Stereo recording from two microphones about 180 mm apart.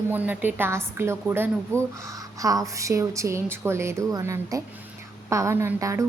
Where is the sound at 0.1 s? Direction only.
10° right (ahead or behind).